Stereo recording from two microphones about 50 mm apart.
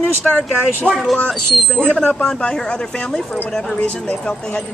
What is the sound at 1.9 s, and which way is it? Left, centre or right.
Speech, centre.